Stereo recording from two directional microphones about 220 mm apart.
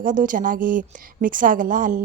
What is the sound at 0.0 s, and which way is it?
A woman's voice, 35° right (ahead or behind).